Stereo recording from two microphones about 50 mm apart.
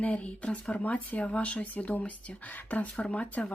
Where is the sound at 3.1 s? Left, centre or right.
Left.